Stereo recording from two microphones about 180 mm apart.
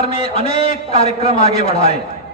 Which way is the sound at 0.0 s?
35° left (ahead or behind).